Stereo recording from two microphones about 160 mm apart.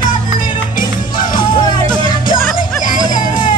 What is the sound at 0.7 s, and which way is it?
Music, 55° left (ahead or behind).